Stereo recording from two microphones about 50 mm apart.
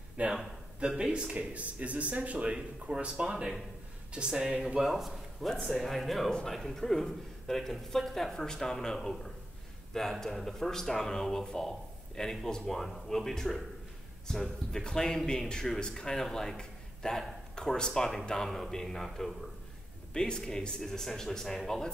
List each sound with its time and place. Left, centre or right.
0.2 s speech: right
0.7 s speech: centre
4.8 s a man's voice: centre